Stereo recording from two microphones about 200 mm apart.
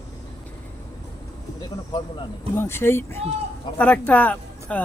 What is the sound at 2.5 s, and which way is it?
Speech, 10° left (ahead or behind).